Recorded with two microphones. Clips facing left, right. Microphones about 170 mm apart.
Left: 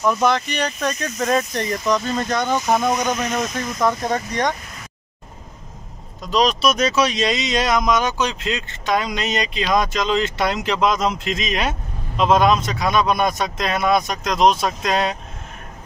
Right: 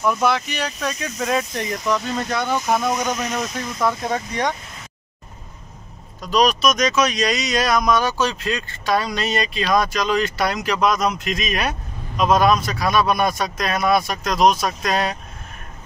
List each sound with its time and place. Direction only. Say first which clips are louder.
0.0 s speech: left 1 dB; 5° right (ahead or behind)
6.3 s speech: even; 25° left (ahead or behind)